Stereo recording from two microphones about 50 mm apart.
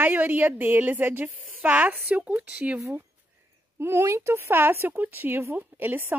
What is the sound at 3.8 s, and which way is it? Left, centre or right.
A woman's voice, right.